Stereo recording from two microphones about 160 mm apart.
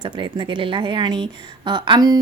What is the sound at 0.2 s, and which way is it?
A woman's voice, 30° right (ahead or behind).